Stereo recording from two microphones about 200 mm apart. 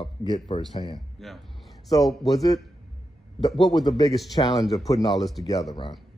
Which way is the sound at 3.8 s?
20° left (ahead or behind).